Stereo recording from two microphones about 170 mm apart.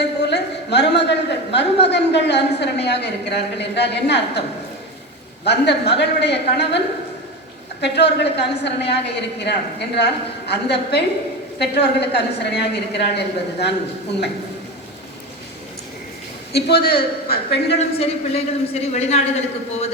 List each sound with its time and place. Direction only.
0.0 s a sound: 85° left
1.5 s a woman's voice: 90° left
5.5 s a woman's voice: 80° left
16.5 s a woman's voice: 70° left (ahead or behind)
17.7 s a man's voice: 35° left (ahead or behind)